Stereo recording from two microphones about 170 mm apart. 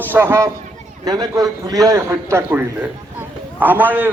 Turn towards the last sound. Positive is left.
turn(degrees=-10)  # may be behind; listen again after turning